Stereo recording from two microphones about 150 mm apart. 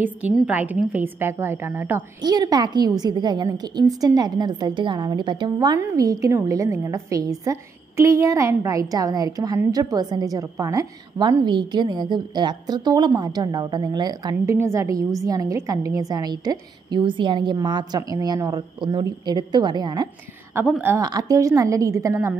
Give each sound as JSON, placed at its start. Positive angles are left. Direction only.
{"t": 0.0, "sound": "a woman's voice", "side_deg": -10}
{"t": 2.2, "sound": "a woman's voice", "side_deg": -25}